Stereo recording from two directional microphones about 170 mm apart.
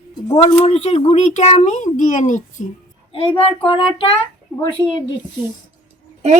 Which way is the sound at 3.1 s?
30° left (ahead or behind).